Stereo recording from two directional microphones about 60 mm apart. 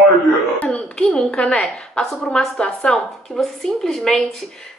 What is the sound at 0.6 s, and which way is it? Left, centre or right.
A woman's voice, centre.